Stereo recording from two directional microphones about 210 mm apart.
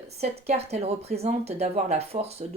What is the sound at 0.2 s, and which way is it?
A woman's voice, 30° right (ahead or behind).